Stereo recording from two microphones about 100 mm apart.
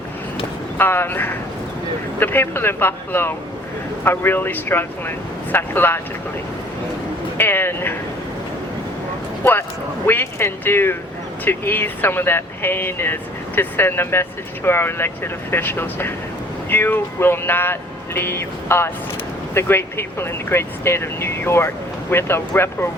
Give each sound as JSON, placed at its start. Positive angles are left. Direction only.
{"t": 0.8, "sound": "speech", "side_deg": 20}
{"t": 7.3, "sound": "speech", "side_deg": 20}
{"t": 9.4, "sound": "speech", "side_deg": 20}